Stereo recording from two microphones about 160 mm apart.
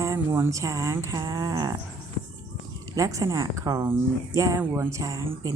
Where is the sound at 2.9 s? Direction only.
20° right (ahead or behind).